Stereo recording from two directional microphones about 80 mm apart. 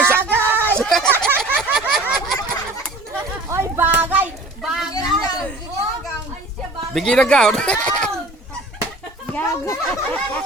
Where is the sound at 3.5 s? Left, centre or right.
Right.